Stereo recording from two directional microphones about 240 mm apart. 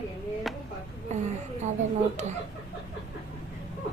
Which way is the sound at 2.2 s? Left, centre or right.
Right.